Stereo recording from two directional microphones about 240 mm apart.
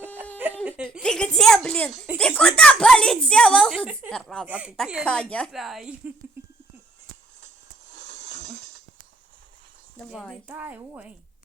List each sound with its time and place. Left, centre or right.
0.6 s a woman's voice: centre
6.4 s a sound: centre
10.1 s a woman's voice: centre